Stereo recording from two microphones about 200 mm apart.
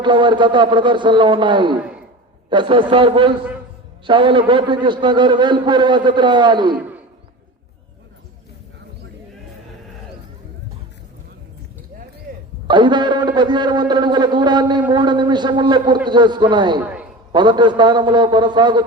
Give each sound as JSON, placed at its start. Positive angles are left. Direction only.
{"t": 0.0, "sound": "a man's voice", "side_deg": -25}
{"t": 12.6, "sound": "a man's voice", "side_deg": -20}
{"t": 16.8, "sound": "a sound", "side_deg": -5}
{"t": 17.3, "sound": "a man's voice", "side_deg": -20}